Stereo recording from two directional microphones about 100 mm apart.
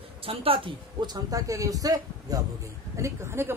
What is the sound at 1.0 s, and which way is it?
A woman's voice, 40° right (ahead or behind).